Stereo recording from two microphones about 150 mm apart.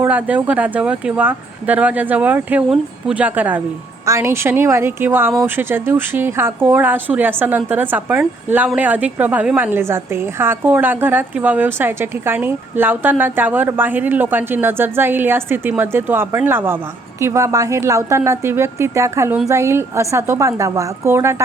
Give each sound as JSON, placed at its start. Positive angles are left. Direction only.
{"t": 0.0, "sound": "a woman's voice", "side_deg": -10}